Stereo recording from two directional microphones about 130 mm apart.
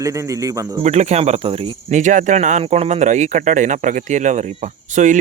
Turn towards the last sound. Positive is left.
turn(degrees=-70)  # may be behind; listen again after turning